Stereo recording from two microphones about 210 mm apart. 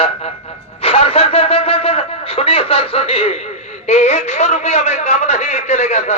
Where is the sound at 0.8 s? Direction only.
25° left (ahead or behind).